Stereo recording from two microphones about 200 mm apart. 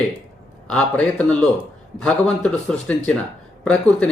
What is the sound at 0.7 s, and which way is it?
Speech, 5° left (ahead or behind).